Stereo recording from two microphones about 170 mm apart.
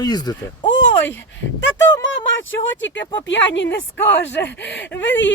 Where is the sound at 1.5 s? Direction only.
90° left.